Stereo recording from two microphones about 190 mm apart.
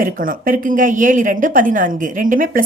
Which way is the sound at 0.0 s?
45° right (ahead or behind).